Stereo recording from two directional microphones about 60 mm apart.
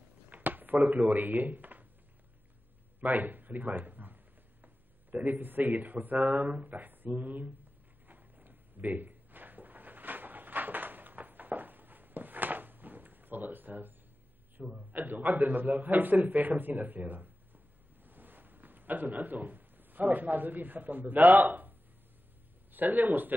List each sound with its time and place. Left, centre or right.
0.3 s a sound: right
0.8 s speech: right
3.0 s a sound: right
5.1 s speech: right
8.1 s drawer open or close: right
14.8 s a man's voice: right